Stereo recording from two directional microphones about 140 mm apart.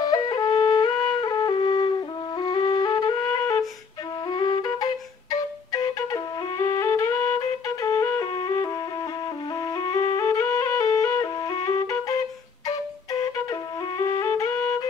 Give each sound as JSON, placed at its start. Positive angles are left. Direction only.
{"t": 0.0, "sound": "flute", "side_deg": 30}
{"t": 9.8, "sound": "music", "side_deg": 30}
{"t": 12.6, "sound": "flute", "side_deg": 25}